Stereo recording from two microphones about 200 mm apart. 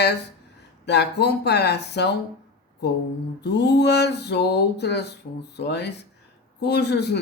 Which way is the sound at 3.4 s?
55° left (ahead or behind).